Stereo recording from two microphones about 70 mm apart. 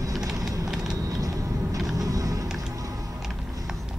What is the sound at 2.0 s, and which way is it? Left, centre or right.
Music, right.